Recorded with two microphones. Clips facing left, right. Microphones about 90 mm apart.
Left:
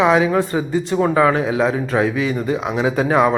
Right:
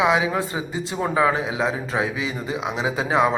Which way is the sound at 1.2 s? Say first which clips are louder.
Left 3 dB; 55° left (ahead or behind).